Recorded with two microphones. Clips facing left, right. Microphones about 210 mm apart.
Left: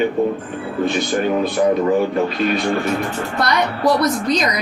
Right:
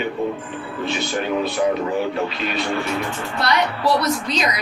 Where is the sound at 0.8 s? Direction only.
45° left (ahead or behind).